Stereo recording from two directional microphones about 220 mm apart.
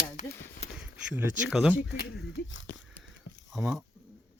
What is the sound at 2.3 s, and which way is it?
Speech, 55° left (ahead or behind).